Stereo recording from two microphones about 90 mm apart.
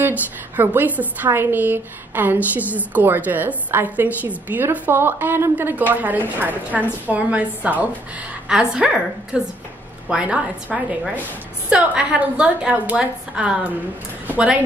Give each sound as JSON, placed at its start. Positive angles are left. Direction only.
{"t": 0.0, "sound": "a woman's voice", "side_deg": -20}